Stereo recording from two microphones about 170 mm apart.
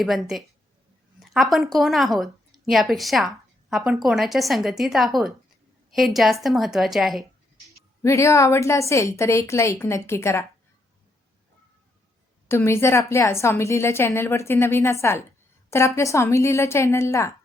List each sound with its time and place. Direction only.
0.0 s a woman's voice: centre (ahead or behind)
8.0 s a woman's voice: 15° left (ahead or behind)
12.5 s a woman's voice: 15° left (ahead or behind)